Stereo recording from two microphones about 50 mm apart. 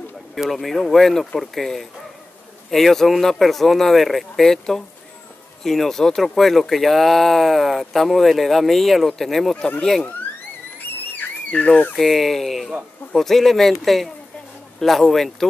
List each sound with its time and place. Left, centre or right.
0.4 s speech: centre
10.8 s a sound: left
11.9 s speech: centre